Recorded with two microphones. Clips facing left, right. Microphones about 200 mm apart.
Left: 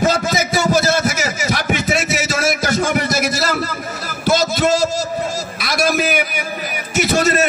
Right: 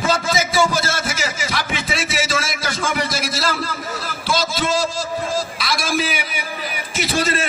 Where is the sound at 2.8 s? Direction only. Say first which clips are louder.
Left 5 dB; 50° left (ahead or behind).